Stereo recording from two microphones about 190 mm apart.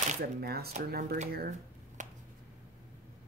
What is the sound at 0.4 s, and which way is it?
Speech, 55° right (ahead or behind).